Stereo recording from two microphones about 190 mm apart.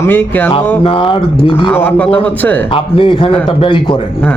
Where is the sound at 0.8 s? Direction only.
30° left (ahead or behind).